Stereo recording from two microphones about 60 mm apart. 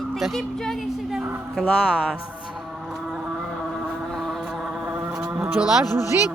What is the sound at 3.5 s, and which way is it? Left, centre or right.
Vehicle, centre.